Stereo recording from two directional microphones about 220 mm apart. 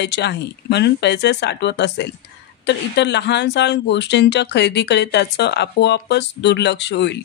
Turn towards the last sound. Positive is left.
turn(degrees=50)  # may be behind; listen again after turning